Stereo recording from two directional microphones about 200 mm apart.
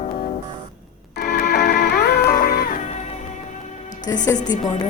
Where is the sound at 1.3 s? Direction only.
55° left (ahead or behind).